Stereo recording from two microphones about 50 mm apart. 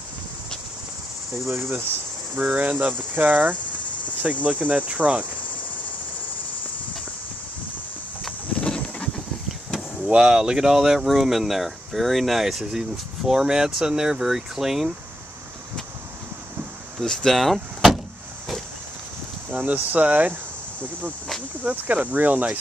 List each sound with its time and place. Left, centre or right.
1.5 s cricket: right
2.4 s cricket: right
4.2 s speech: right
8.5 s clip-clop: centre
10.0 s speech: centre
17.0 s speech: centre
19.5 s cricket: right
21.6 s cricket: right